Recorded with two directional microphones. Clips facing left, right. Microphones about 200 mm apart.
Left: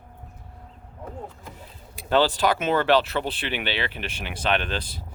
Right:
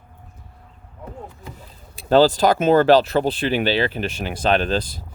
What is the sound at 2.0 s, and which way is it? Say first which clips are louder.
Speech: right 6 dB; 35° right (ahead or behind).